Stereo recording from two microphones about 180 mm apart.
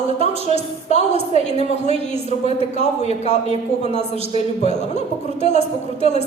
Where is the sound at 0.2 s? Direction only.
40° left (ahead or behind).